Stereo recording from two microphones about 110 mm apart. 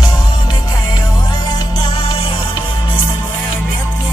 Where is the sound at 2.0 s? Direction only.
55° left (ahead or behind).